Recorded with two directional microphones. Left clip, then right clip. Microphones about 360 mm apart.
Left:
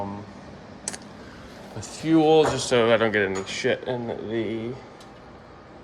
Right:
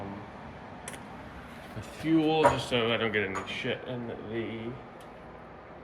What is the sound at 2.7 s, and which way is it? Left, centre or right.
Speech, left.